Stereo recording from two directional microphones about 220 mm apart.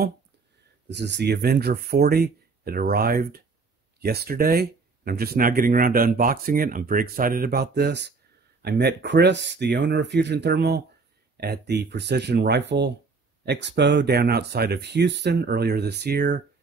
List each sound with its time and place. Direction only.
0.8 s speech: 50° right (ahead or behind)